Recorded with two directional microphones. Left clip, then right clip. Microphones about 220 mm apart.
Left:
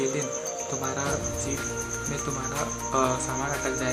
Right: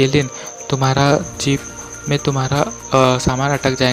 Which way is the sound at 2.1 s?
45° right (ahead or behind).